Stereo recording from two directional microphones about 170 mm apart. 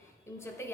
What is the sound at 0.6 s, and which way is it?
Speech, 15° left (ahead or behind).